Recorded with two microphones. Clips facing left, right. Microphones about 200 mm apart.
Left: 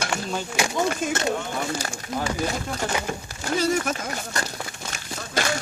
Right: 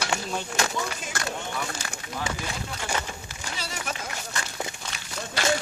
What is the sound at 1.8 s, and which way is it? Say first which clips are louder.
Speech: left 5 dB; 40° left (ahead or behind).